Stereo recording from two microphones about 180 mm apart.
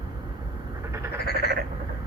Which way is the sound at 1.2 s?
60° left (ahead or behind).